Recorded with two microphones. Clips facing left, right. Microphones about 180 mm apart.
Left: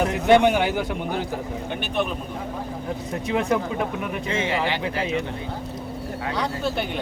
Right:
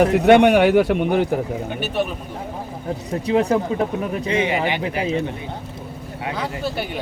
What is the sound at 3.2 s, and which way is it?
Speech, 35° right (ahead or behind).